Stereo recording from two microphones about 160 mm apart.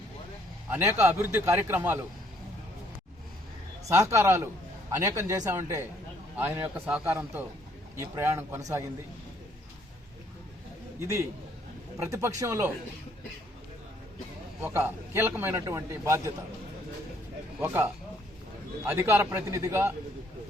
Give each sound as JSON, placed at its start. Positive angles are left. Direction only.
{"t": 0.7, "sound": "a man's voice", "side_deg": -15}
{"t": 3.8, "sound": "a man's voice", "side_deg": -20}
{"t": 11.9, "sound": "speech", "side_deg": -20}
{"t": 14.6, "sound": "a man's voice", "side_deg": -15}
{"t": 17.6, "sound": "a man's voice", "side_deg": -15}